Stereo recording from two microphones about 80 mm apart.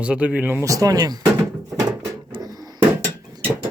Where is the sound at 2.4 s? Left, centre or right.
Right.